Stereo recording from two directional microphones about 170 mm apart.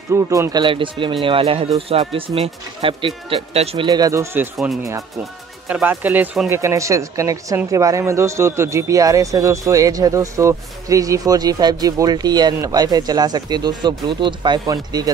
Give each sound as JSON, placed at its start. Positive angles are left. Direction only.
{"t": 0.1, "sound": "speech", "side_deg": -20}
{"t": 5.7, "sound": "speech", "side_deg": -10}
{"t": 6.5, "sound": "speech", "side_deg": -15}